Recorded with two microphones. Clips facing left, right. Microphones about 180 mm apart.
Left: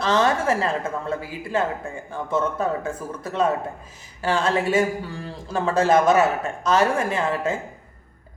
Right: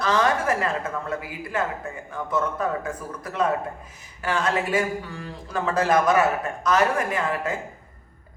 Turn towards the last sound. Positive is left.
turn(degrees=25)  # may be behind; listen again after turning